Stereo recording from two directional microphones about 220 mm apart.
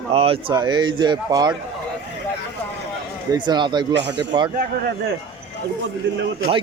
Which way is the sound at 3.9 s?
55° right (ahead or behind).